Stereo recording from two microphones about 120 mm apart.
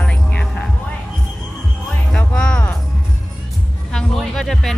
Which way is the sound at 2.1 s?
10° left (ahead or behind).